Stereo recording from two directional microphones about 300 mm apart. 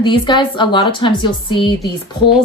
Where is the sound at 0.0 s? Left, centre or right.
Centre.